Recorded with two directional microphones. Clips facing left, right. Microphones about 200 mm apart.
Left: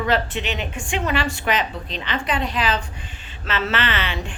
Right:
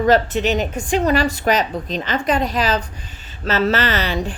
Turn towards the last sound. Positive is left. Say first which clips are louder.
# right 5 dB
turn(degrees=-40)  # may be behind; listen again after turning